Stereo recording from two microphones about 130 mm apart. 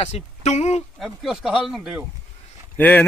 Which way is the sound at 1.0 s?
5° right (ahead or behind).